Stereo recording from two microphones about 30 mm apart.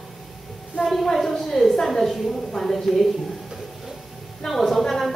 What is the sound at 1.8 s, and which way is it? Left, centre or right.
A woman's voice, centre.